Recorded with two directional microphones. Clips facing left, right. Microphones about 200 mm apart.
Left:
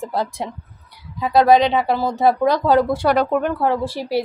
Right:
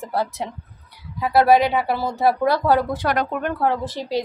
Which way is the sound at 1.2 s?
20° left (ahead or behind).